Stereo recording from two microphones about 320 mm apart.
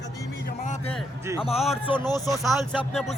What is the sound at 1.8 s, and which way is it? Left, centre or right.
Speech, centre.